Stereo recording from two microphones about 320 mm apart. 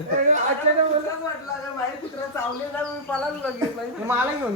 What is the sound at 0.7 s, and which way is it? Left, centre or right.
Speech, right.